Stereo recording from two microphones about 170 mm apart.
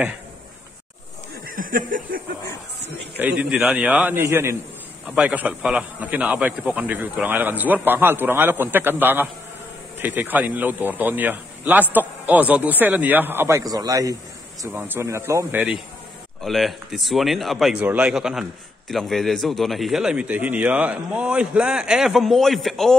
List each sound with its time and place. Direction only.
1.5 s snicker: 55° right (ahead or behind)
3.2 s a man's voice: 10° right (ahead or behind)
16.4 s speech: centre (ahead or behind)